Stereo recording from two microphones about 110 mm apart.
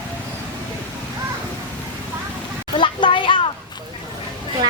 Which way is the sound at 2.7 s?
50° left (ahead or behind).